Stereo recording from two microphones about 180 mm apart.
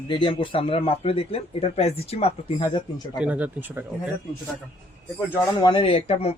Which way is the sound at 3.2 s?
10° right (ahead or behind).